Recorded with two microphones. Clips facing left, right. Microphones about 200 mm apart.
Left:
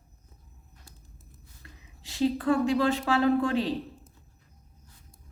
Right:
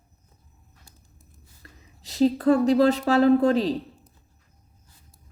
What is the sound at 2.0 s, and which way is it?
A woman's voice, 40° right (ahead or behind).